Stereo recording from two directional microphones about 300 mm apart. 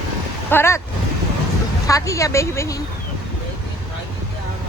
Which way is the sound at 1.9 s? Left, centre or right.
Centre.